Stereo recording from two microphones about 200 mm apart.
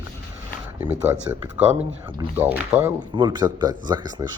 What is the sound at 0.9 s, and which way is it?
Speech, 10° right (ahead or behind).